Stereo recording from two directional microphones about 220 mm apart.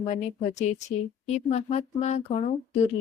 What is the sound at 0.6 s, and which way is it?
Speech, 30° left (ahead or behind).